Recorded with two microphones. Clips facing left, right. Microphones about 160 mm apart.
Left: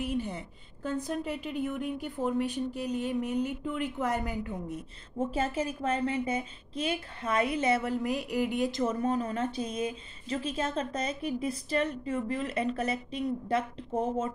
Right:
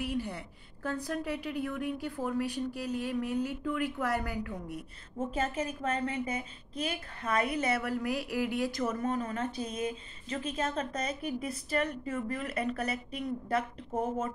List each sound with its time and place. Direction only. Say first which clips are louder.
0.0 s a woman's voice: left 2 dB; 20° left (ahead or behind)